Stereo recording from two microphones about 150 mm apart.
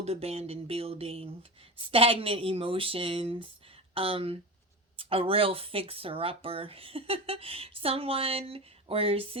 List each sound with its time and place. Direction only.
0.0 s speech: 45° right (ahead or behind)